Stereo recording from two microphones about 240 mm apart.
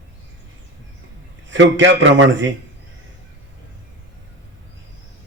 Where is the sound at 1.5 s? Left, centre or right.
Right.